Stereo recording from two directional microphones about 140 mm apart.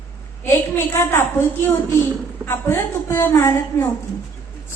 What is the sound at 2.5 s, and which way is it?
A woman's voice, 15° left (ahead or behind).